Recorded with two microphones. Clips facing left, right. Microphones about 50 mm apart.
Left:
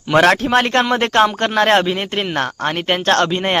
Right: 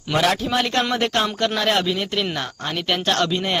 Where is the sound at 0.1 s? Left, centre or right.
Left.